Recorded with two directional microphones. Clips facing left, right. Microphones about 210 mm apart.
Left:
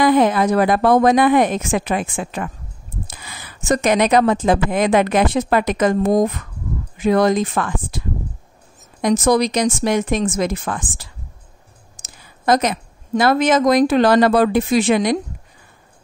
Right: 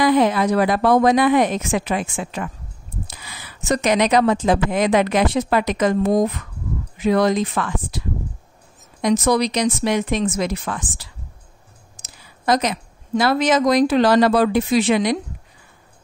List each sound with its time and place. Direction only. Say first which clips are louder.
0.0 s a woman's voice: left 2 dB; 50° left (ahead or behind)
9.0 s a woman's voice: left 2 dB; 45° left (ahead or behind)
12.4 s a woman's voice: left 2 dB; 50° left (ahead or behind)